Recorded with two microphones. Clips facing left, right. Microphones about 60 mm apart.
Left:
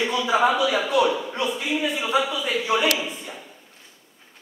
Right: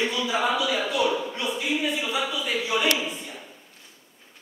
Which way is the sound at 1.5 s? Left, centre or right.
Centre.